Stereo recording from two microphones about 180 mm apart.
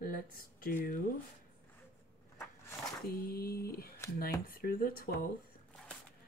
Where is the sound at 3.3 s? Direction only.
60° left (ahead or behind).